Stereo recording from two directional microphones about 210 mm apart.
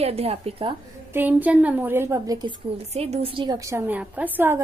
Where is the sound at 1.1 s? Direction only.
10° right (ahead or behind).